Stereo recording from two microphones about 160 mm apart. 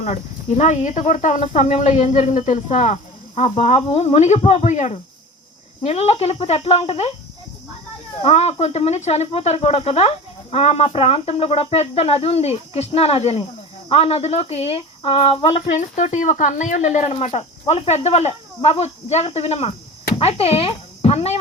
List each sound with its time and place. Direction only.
0.0 s speech: 45° left (ahead or behind)
8.2 s speech: 40° left (ahead or behind)